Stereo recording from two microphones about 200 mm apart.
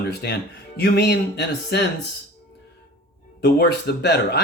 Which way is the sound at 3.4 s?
55° left (ahead or behind).